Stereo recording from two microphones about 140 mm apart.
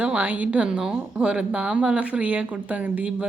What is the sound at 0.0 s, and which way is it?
A woman's voice, 10° right (ahead or behind).